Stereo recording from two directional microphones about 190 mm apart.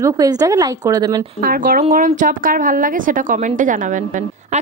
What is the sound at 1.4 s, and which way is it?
A woman's voice, 50° right (ahead or behind).